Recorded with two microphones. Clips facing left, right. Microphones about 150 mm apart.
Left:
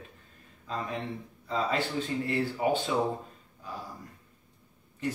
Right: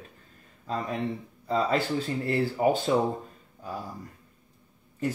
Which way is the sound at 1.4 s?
40° right (ahead or behind).